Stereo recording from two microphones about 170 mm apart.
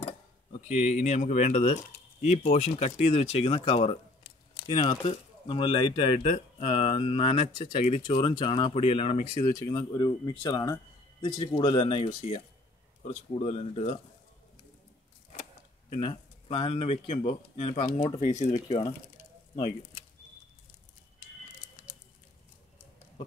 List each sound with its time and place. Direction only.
0.0 s speech: 40° left (ahead or behind)
5.5 s speech: 30° left (ahead or behind)
13.0 s speech: 40° left (ahead or behind)
15.9 s speech: 35° left (ahead or behind)